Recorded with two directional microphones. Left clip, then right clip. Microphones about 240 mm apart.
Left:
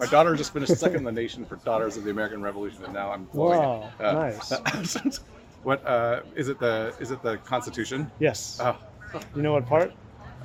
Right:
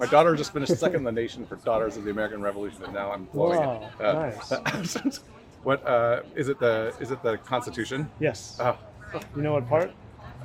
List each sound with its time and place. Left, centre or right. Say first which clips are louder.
0.1 s speech: even; centre
3.5 s speech: left 5 dB; left
3.9 s speech: right 3 dB; centre
4.2 s speech: left 2 dB; left
4.4 s speech: left 1 dB; centre
8.2 s speech: left 4 dB; left
8.5 s speech: even; centre
9.4 s speech: left 2 dB; left